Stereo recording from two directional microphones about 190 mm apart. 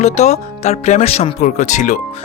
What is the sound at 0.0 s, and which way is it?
Speech, 35° left (ahead or behind).